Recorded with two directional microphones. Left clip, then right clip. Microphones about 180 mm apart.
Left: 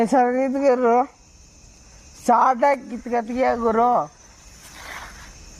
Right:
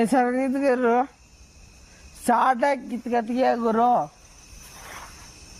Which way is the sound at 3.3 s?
15° right (ahead or behind).